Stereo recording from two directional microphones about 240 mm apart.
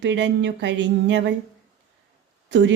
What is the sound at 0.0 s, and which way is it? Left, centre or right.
Speech, right.